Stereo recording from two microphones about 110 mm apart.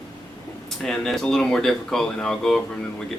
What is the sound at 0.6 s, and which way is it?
Speech, 5° left (ahead or behind).